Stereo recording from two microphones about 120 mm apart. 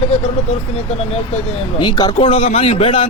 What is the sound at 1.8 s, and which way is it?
Speech, 35° left (ahead or behind).